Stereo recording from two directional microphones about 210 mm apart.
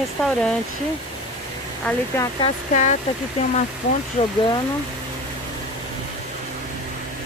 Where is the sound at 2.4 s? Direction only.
35° left (ahead or behind).